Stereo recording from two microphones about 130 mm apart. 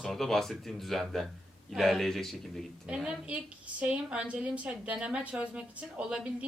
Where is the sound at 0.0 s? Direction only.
5° left (ahead or behind).